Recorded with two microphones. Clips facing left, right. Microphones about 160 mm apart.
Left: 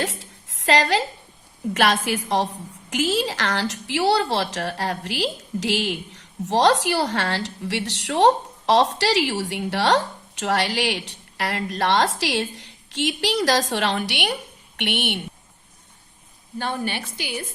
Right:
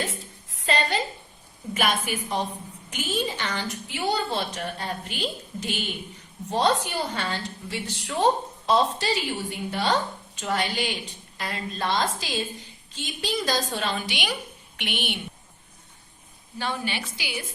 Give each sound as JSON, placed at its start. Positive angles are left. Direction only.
{"t": 0.0, "sound": "a sound", "side_deg": 85}
{"t": 1.7, "sound": "a woman's voice", "side_deg": 90}
{"t": 16.6, "sound": "a woman's voice", "side_deg": 50}